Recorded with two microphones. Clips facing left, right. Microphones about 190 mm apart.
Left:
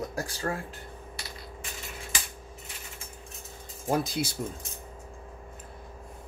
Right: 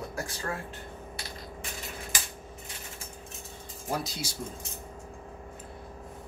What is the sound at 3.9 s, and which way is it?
Speech, 55° left (ahead or behind).